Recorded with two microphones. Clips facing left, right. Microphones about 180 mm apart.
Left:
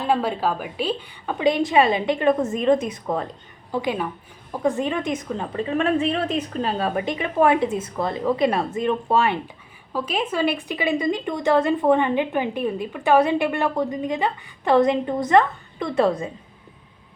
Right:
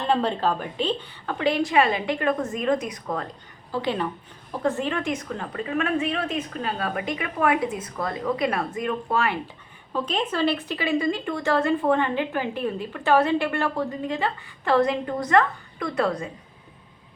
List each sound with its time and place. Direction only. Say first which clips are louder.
0.0 s a woman's voice: left 1 dB; 10° left (ahead or behind); by 3.2 s 25° left (ahead or behind)
3.7 s a woman's voice: left 1 dB; 10° left (ahead or behind)
9.9 s a woman's voice: left 1 dB; 10° left (ahead or behind); by 16.3 s 25° left (ahead or behind)